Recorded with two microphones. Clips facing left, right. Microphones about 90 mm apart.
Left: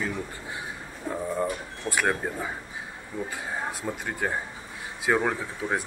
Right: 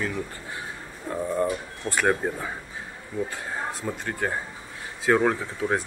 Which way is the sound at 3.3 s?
5° left (ahead or behind).